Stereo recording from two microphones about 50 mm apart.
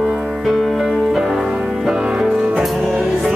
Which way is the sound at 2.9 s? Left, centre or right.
Right.